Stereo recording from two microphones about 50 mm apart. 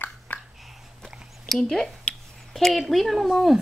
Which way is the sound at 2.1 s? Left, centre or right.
Centre.